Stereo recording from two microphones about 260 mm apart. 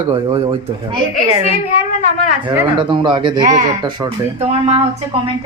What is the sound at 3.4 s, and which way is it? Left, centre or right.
Speech, right.